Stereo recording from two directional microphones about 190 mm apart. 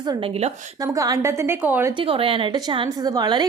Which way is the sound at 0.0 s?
25° right (ahead or behind).